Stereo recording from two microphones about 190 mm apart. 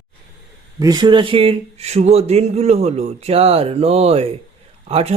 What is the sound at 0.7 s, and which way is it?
A man's voice, 20° right (ahead or behind).